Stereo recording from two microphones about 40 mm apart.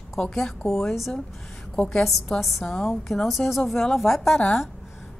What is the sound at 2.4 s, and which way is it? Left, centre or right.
A woman's voice, centre.